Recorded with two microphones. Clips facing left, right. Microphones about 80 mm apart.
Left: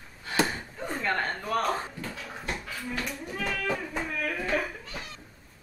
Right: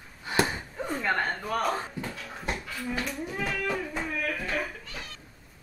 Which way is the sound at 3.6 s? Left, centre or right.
Centre.